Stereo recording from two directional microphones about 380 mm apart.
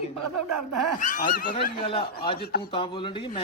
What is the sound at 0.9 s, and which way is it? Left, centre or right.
A man's voice, centre.